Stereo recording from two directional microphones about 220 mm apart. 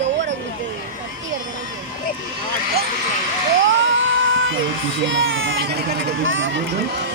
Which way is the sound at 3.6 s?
60° right (ahead or behind).